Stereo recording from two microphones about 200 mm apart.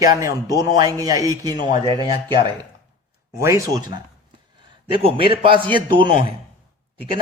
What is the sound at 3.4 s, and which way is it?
Speech, 15° right (ahead or behind).